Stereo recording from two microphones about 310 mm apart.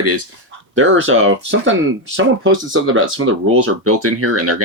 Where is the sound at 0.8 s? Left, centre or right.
Right.